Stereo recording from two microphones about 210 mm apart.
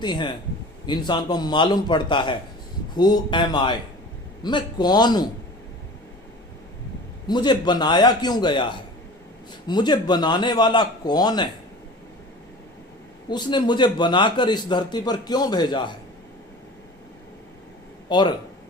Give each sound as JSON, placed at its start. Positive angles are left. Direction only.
{"t": 0.0, "sound": "a man's voice", "side_deg": 20}
{"t": 7.3, "sound": "a man's voice", "side_deg": 20}
{"t": 13.3, "sound": "a man's voice", "side_deg": 20}
{"t": 18.1, "sound": "a man's voice", "side_deg": 20}